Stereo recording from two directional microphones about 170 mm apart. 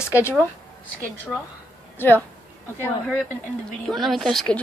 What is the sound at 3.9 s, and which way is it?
Speech, centre (ahead or behind).